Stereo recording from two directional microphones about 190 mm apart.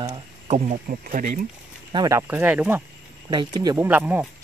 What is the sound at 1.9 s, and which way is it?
Speech, 20° right (ahead or behind).